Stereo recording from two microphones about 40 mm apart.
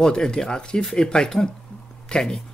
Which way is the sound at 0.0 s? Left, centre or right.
Left.